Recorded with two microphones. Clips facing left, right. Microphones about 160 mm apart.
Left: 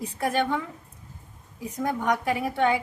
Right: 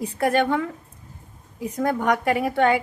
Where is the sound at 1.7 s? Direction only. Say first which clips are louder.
Right 4 dB; 70° right (ahead or behind).